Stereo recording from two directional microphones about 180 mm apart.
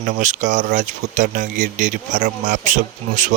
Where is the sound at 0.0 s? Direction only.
40° right (ahead or behind).